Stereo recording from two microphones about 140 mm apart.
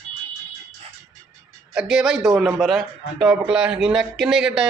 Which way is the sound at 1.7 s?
5° right (ahead or behind).